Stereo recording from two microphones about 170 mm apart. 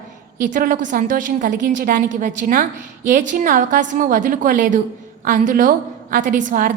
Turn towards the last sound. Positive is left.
turn(degrees=-50)  # may be behind; listen again after turning